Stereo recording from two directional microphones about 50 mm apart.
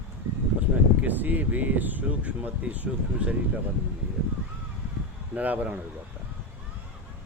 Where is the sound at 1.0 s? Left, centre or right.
Right.